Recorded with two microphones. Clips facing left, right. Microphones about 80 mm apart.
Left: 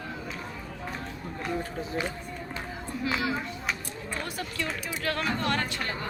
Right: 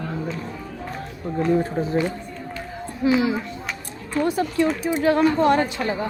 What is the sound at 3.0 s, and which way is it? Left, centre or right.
Speech, right.